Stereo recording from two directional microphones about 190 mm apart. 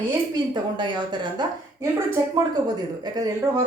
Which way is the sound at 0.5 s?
25° right (ahead or behind).